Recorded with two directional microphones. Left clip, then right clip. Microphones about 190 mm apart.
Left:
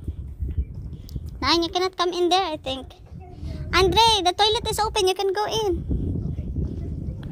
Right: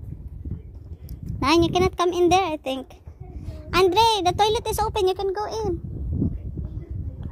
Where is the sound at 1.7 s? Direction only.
30° right (ahead or behind).